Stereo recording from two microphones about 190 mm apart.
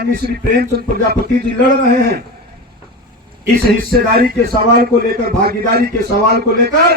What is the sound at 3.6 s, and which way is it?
A man's voice, 55° right (ahead or behind).